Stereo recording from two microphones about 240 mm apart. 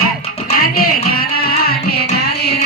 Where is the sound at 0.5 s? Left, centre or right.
Left.